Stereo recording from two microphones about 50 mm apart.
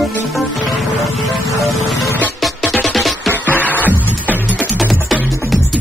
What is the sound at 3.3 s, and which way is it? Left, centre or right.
Music, left.